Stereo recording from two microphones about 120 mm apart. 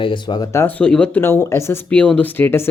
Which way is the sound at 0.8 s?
10° left (ahead or behind).